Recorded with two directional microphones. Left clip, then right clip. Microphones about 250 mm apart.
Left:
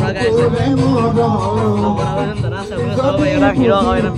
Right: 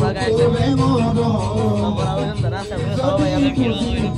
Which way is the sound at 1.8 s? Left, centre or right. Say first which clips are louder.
Left 4 dB; centre.